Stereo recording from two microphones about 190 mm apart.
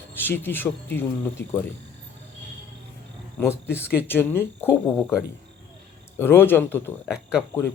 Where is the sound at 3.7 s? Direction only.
10° left (ahead or behind).